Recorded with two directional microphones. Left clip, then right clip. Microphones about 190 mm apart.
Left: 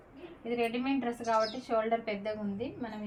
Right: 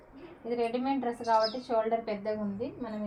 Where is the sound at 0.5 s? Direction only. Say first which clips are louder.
Right 2 dB; 35° left (ahead or behind).